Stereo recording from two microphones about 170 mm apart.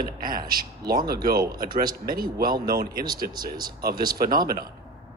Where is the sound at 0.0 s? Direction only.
55° right (ahead or behind).